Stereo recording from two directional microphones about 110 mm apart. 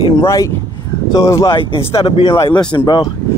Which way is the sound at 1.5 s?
55° left (ahead or behind).